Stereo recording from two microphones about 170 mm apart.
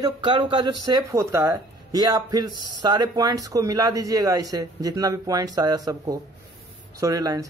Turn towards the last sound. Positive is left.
turn(degrees=-25)  # may be behind; listen again after turning